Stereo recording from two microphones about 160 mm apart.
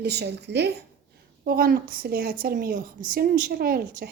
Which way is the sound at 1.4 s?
70° right (ahead or behind).